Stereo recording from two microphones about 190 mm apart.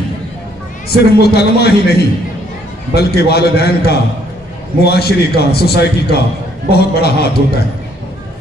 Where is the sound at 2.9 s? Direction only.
55° left (ahead or behind).